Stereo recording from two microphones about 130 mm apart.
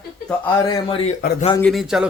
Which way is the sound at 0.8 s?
45° left (ahead or behind).